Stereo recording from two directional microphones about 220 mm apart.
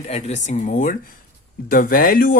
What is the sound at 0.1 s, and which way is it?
Speech, 30° left (ahead or behind).